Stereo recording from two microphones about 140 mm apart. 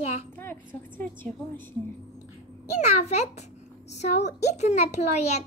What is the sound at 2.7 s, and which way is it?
A child's voice, 55° left (ahead or behind).